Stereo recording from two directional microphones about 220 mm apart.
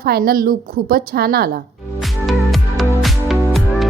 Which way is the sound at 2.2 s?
Centre (ahead or behind).